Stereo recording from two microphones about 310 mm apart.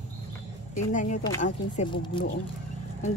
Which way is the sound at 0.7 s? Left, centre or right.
Left.